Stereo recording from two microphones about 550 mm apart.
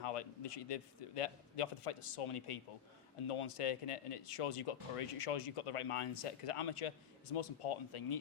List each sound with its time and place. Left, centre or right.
0.0 s a man's voice: left